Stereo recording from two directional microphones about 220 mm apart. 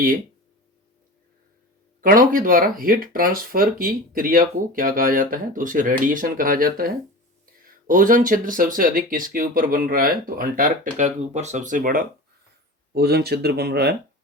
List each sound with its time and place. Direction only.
2.0 s speech: 40° right (ahead or behind)